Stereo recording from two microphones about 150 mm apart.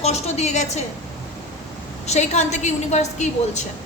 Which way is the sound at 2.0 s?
50° left (ahead or behind).